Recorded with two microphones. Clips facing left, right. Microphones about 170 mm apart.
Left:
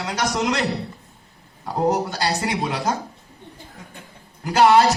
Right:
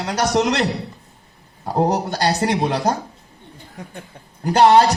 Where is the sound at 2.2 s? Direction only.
40° right (ahead or behind).